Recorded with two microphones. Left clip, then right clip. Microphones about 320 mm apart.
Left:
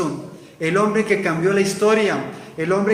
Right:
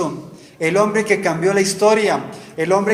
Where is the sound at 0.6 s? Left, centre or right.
Centre.